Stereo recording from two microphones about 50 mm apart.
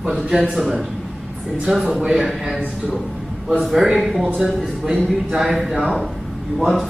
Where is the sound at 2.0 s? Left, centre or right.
Centre.